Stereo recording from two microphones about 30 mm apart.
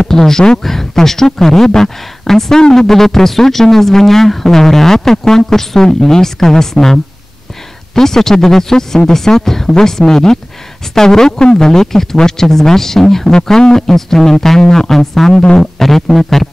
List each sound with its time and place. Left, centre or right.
0.1 s speech: centre
13.3 s speech: left
13.7 s speech: centre